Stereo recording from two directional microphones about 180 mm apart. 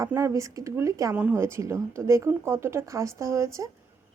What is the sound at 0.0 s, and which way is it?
Speech, 15° right (ahead or behind).